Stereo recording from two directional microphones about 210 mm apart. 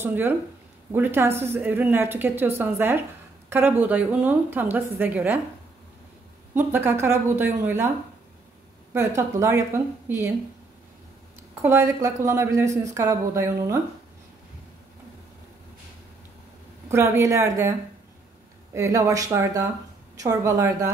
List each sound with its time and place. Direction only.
0.0 s a woman's voice: 10° right (ahead or behind)
6.5 s a woman's voice: 10° right (ahead or behind)
8.9 s a woman's voice: 15° right (ahead or behind)
11.6 s a woman's voice: 15° right (ahead or behind)
16.9 s a woman's voice: 10° right (ahead or behind)